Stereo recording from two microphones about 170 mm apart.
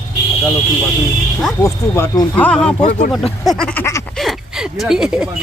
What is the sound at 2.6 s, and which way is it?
Speech, 40° left (ahead or behind).